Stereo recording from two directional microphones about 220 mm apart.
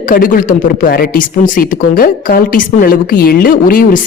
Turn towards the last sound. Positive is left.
turn(degrees=40)  # may be behind; listen again after turning